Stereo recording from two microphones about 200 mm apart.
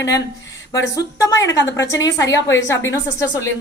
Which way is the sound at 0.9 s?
15° left (ahead or behind).